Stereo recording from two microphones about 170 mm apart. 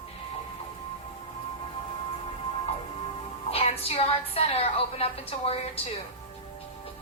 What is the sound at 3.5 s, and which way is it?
A woman's voice, 35° left (ahead or behind).